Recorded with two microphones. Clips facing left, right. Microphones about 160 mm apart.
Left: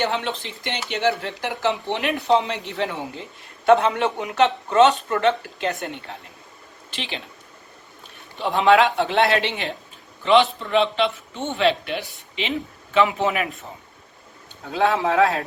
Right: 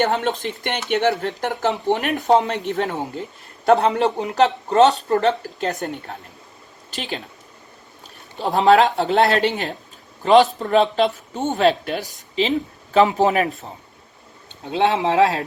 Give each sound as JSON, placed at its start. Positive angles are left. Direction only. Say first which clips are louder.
{"t": 0.0, "sound": "speech", "louder": "right 4 dB", "side_deg": -45}
{"t": 8.4, "sound": "speech", "louder": "right 2 dB", "side_deg": -40}
{"t": 14.6, "sound": "speech", "louder": "right 2 dB", "side_deg": -25}